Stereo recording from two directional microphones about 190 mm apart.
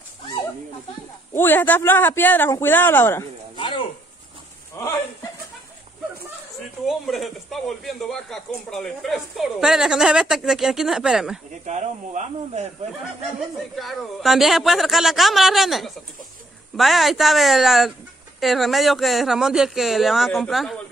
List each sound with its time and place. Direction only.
1.3 s a man's voice: 10° left (ahead or behind)
3.5 s a sound: 25° left (ahead or behind)
4.7 s a man's voice: 15° left (ahead or behind)
6.9 s speech: centre (ahead or behind)
11.6 s speech: 40° right (ahead or behind)
13.7 s speech: centre (ahead or behind)